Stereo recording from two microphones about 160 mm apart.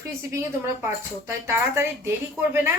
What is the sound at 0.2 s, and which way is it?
A woman's voice, 15° right (ahead or behind).